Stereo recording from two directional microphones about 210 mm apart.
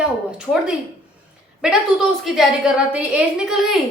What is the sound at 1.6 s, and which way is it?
A woman's voice, 5° right (ahead or behind).